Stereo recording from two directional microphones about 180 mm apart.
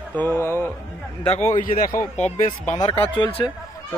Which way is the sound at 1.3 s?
40° left (ahead or behind).